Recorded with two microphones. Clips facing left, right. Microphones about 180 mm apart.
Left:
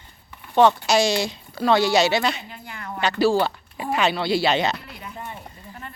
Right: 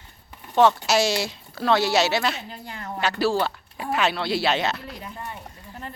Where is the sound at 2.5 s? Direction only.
35° right (ahead or behind).